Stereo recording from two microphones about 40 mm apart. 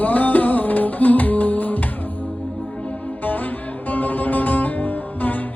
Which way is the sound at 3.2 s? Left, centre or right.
Left.